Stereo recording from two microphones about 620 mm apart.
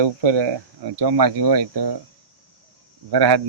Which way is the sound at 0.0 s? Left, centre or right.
Right.